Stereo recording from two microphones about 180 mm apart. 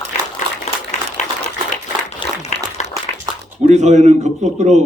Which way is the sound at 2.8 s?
40° left (ahead or behind).